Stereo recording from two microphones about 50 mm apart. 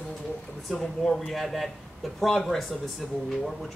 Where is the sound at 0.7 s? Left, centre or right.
Centre.